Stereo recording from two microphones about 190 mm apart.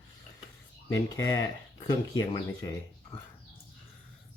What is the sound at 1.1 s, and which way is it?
Speech, 20° left (ahead or behind).